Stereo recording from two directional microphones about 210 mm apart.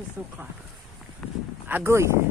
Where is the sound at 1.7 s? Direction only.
10° right (ahead or behind).